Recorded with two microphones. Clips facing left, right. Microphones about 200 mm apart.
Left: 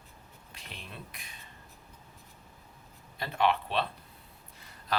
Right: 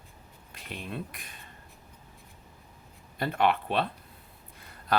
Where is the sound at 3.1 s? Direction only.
55° right (ahead or behind).